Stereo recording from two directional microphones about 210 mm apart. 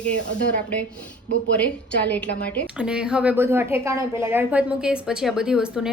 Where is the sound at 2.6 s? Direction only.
5° right (ahead or behind).